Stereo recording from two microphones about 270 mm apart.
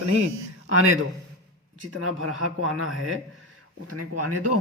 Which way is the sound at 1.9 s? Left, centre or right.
Right.